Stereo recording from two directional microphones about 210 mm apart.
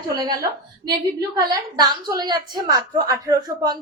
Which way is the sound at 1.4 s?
20° right (ahead or behind).